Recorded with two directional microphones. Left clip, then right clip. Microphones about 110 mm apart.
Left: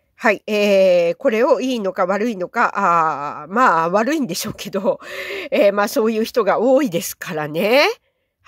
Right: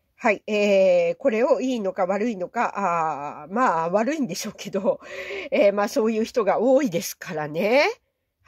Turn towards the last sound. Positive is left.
turn(degrees=35)  # may be behind; listen again after turning